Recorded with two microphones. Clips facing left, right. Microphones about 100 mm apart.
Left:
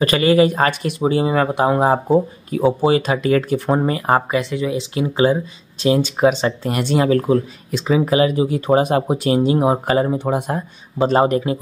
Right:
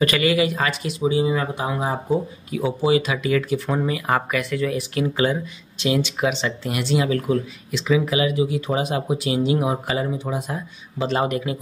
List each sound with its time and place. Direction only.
0.0 s speech: 35° left (ahead or behind); by 2.0 s 55° left (ahead or behind)
2.0 s speech: 40° left (ahead or behind)
5.8 s speech: 40° left (ahead or behind)
10.1 s speech: 60° left (ahead or behind); by 11.6 s 35° left (ahead or behind)